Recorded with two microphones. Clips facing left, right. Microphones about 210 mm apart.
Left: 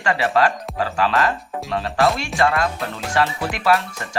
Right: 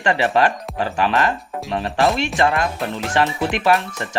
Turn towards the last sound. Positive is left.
turn(degrees=-20)  # may be behind; listen again after turning